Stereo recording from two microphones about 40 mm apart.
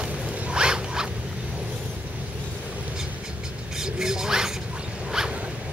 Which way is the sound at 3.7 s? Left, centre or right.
Centre.